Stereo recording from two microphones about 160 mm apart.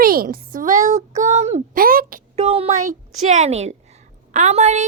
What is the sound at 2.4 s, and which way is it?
A woman's voice, 40° right (ahead or behind).